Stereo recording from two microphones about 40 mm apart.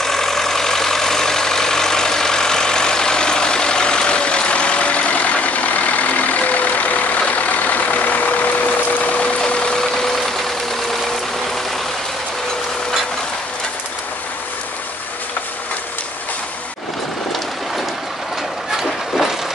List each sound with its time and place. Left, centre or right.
0.0 s vehicle: centre; by 9.4 s left
9.4 s vehicle: left